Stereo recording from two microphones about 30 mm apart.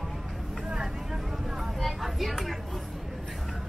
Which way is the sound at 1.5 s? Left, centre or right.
Centre.